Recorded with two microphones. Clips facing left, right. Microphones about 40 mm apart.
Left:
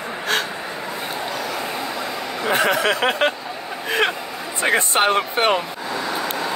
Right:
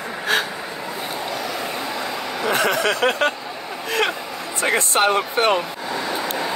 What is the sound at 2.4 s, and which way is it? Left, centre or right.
Speech, centre.